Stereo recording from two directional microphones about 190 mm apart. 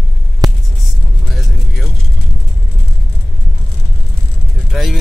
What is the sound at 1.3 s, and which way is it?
Vehicle, centre (ahead or behind).